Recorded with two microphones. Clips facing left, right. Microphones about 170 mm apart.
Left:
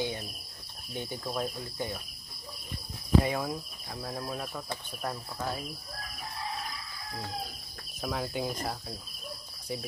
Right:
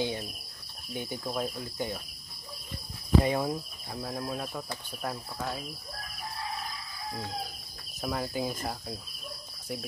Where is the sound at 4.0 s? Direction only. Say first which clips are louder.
Right 2 dB; 15° right (ahead or behind).